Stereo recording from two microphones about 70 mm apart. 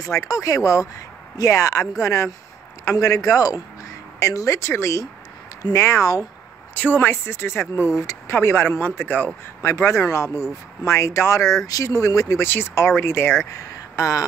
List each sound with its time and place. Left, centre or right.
0.2 s speech: left
4.6 s speech: left
6.7 s speech: left
9.6 s speech: left
12.4 s speech: left
13.5 s a sound: left